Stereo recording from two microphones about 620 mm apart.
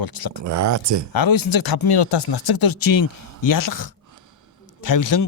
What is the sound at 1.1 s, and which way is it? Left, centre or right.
Speech, left.